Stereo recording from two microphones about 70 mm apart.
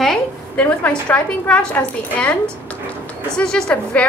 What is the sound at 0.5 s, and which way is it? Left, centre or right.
A woman's voice, left.